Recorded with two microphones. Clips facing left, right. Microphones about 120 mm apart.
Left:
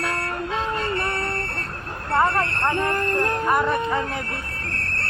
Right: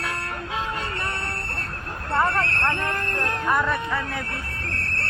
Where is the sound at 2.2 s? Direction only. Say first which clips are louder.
Left 2 dB; 15° left (ahead or behind).